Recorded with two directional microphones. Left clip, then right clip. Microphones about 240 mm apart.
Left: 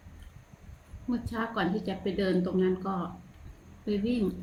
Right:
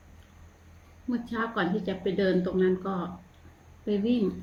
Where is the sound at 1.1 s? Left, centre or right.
Centre.